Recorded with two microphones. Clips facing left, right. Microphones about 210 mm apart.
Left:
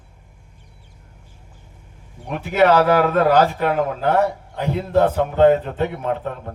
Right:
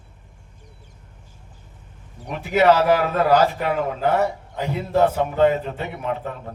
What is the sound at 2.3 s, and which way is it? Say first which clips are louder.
A man's voice: left 1 dB; 55° left (ahead or behind).